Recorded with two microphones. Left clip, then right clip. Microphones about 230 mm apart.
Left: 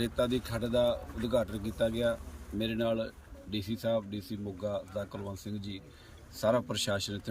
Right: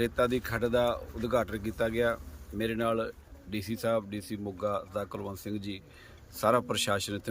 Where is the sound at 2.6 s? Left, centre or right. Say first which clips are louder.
Right 2 dB; centre.